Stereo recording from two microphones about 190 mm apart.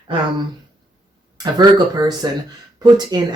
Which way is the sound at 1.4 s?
20° right (ahead or behind).